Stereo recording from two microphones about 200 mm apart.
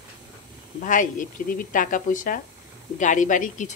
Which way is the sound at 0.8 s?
40° left (ahead or behind).